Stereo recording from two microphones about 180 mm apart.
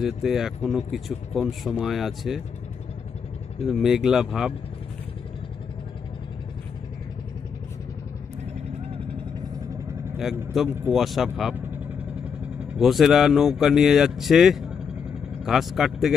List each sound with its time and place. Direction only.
0.0 s speech: centre (ahead or behind)
3.6 s speech: centre (ahead or behind)
10.1 s a man's voice: centre (ahead or behind)